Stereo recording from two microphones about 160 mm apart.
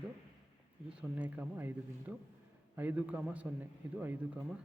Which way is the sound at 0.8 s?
10° right (ahead or behind).